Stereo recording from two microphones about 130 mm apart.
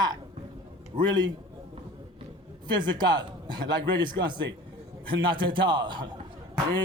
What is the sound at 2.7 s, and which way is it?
A man's voice, 35° right (ahead or behind).